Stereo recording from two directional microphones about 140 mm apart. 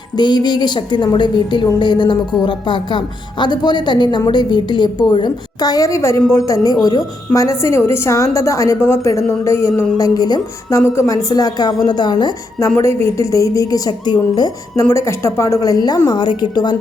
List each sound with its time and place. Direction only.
0.2 s a woman's voice: 30° left (ahead or behind)